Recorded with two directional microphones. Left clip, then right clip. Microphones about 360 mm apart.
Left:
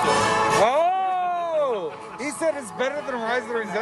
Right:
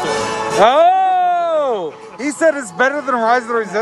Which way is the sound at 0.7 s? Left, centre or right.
Right.